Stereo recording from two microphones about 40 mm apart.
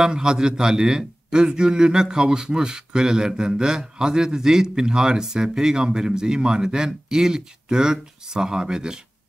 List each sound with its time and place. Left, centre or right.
0.0 s a man's voice: centre